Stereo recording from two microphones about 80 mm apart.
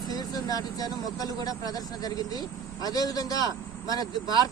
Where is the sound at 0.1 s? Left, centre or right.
Left.